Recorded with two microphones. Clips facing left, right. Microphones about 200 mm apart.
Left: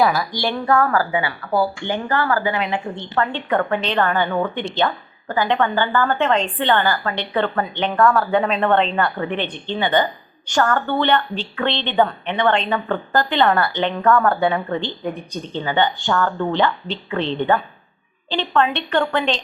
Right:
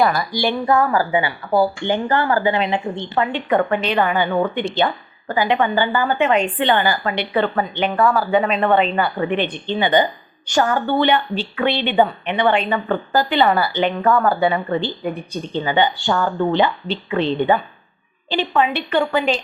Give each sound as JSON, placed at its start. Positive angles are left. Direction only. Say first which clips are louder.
{"t": 0.0, "sound": "a woman's voice", "louder": "even", "side_deg": 0}
{"t": 0.7, "sound": "a woman's voice", "louder": "even", "side_deg": -15}
{"t": 9.1, "sound": "a woman's voice", "louder": "right 4 dB", "side_deg": -15}
{"t": 15.4, "sound": "a woman's voice", "louder": "right 2 dB", "side_deg": -15}